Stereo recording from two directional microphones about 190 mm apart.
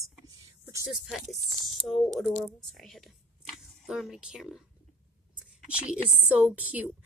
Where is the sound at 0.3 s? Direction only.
15° right (ahead or behind).